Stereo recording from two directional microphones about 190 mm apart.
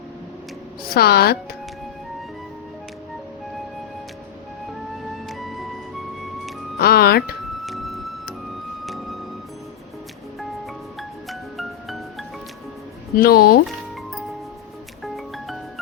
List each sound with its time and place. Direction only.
0.9 s speech: 55° left (ahead or behind)
5.1 s music: centre (ahead or behind)
6.7 s speech: 55° left (ahead or behind)
7.6 s music: centre (ahead or behind)
11.3 s music: centre (ahead or behind)
13.1 s speech: 50° left (ahead or behind)
15.0 s music: centre (ahead or behind)